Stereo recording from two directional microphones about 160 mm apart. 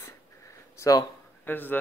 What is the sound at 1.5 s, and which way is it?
Speech, 10° left (ahead or behind).